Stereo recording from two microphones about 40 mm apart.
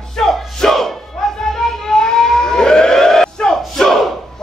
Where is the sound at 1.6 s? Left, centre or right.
Centre.